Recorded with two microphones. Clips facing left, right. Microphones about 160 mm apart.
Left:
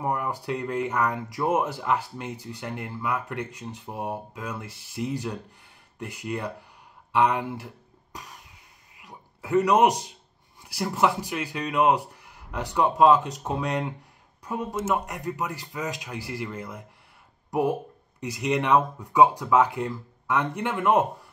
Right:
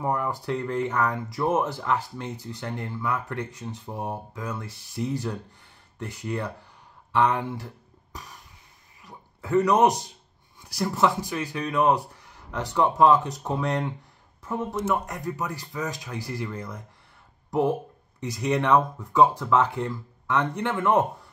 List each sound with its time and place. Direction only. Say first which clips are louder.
0.0 s speech: right 1 dB; 10° left (ahead or behind)
9.0 s a sound: right 1 dB; 15° left (ahead or behind)
10.8 s speech: right 1 dB; 15° left (ahead or behind)